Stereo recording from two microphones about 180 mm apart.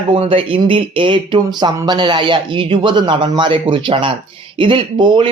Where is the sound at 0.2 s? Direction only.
30° right (ahead or behind).